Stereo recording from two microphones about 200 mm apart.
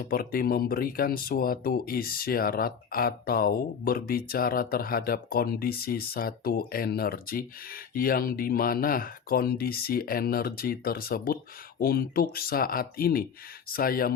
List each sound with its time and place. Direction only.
0.1 s speech: 45° left (ahead or behind)